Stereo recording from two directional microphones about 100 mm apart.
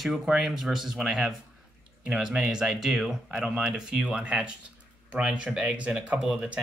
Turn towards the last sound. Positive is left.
turn(degrees=-10)  # may be behind; listen again after turning